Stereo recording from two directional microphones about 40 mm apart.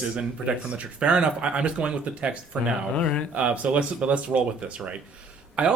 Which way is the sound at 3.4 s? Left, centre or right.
Right.